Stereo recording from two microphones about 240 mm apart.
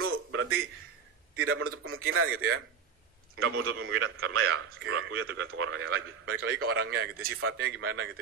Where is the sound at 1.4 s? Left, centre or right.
Right.